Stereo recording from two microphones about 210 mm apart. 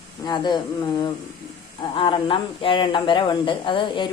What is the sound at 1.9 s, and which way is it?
A woman's voice, 25° left (ahead or behind).